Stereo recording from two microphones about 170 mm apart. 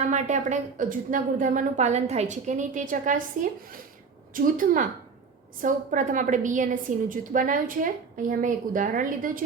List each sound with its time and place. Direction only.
0.0 s a woman's voice: 45° right (ahead or behind)
4.5 s a woman's voice: 50° right (ahead or behind)